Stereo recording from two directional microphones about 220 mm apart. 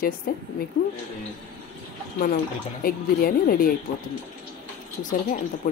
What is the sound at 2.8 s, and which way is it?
Speech, 40° left (ahead or behind).